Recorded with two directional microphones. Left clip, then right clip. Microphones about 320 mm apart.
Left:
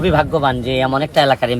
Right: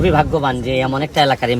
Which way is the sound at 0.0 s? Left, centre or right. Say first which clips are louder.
Even; centre.